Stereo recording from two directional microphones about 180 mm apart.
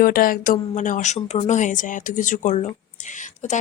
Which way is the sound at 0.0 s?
55° left (ahead or behind).